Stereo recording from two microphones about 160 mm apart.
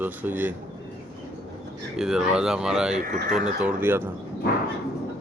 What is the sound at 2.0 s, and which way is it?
Speech, 5° right (ahead or behind).